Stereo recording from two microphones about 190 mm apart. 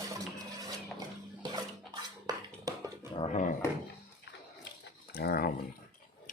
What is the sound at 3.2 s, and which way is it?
Dog, 40° left (ahead or behind).